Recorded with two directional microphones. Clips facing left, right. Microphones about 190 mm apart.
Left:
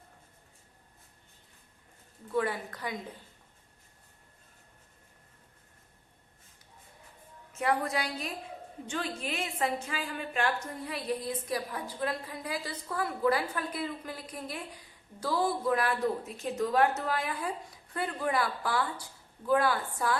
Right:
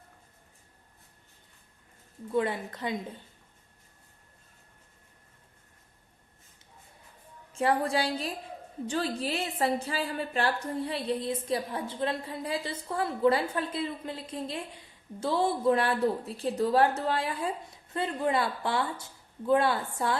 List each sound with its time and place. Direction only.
2.3 s a woman's voice: 25° right (ahead or behind)
7.5 s a woman's voice: 30° right (ahead or behind)